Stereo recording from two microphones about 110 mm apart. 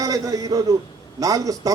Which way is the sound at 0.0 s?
30° right (ahead or behind).